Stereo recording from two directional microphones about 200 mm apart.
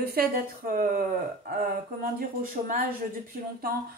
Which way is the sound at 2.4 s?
45° right (ahead or behind).